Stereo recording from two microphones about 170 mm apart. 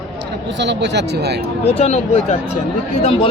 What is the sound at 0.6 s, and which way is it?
Speech, 90° right.